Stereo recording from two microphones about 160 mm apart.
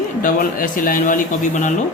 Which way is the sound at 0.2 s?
60° left (ahead or behind).